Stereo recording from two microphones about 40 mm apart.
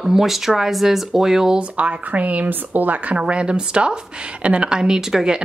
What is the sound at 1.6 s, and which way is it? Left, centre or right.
Speech, right.